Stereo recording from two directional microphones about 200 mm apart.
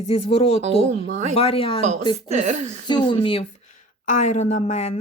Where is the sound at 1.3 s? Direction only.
30° left (ahead or behind).